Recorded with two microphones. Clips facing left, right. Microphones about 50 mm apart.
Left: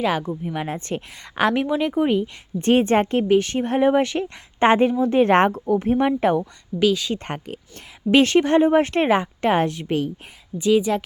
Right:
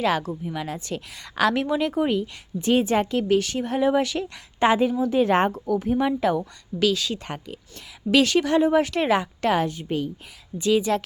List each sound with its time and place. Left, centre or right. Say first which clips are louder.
0.0 s speech: left 1 dB; centre
0.5 s speech: left 3 dB; left
1.6 s speech: left 2 dB; centre
2.6 s a woman's voice: left 3 dB; left
3.2 s a woman's voice: left 3 dB; left
4.7 s a woman's voice: left 5 dB; left
6.7 s speech: left 3 dB; centre
7.3 s a woman's voice: left 4 dB; left
8.1 s a woman's voice: left 3 dB; left
9.6 s a woman's voice: left 4 dB; left
10.6 s speech: left 3 dB; centre